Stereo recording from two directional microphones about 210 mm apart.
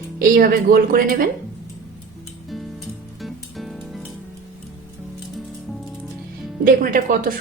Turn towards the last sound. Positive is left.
turn(degrees=-40)  # may be behind; listen again after turning